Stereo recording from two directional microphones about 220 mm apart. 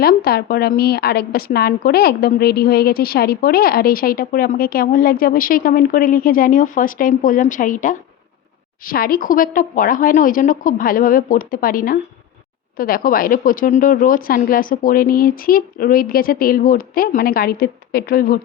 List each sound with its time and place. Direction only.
0.0 s a woman's voice: 45° left (ahead or behind)